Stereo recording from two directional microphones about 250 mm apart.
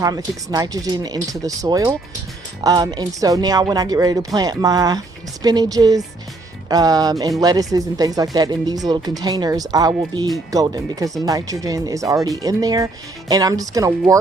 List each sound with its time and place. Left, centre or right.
0.0 s speech: centre